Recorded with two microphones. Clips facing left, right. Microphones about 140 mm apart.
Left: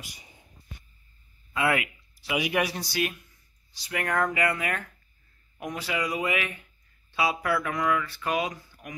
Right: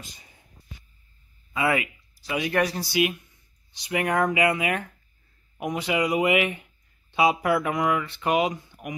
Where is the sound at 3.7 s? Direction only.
20° right (ahead or behind).